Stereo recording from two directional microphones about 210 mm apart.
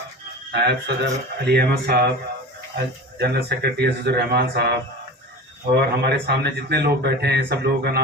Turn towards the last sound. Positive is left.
turn(degrees=-50)  # may be behind; listen again after turning